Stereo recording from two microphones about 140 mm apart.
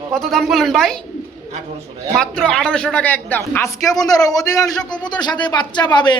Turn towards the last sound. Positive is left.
turn(degrees=30)  # may be behind; listen again after turning